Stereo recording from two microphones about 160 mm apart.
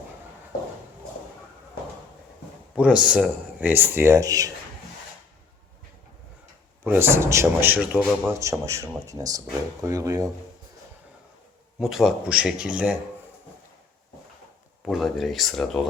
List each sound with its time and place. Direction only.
2.7 s speech: 5° right (ahead or behind)
6.8 s speech: 15° right (ahead or behind)
8.3 s speech: 20° right (ahead or behind)
11.8 s speech: centre (ahead or behind)
14.8 s speech: centre (ahead or behind)